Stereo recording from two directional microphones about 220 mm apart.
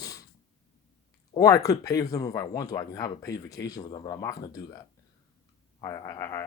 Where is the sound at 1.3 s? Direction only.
15° left (ahead or behind).